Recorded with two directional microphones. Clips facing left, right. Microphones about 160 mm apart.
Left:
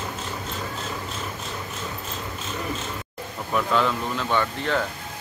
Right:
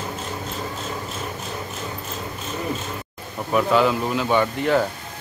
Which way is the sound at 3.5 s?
5° right (ahead or behind).